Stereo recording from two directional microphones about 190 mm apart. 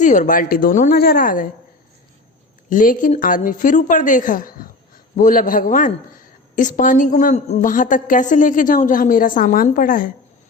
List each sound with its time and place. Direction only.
0.0 s a woman's voice: 40° left (ahead or behind)
2.6 s a woman's voice: 45° left (ahead or behind)